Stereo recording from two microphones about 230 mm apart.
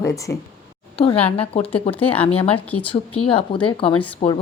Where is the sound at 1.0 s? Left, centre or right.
Left.